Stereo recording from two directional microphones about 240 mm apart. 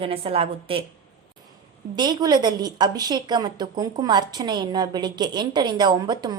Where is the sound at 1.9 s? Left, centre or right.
Centre.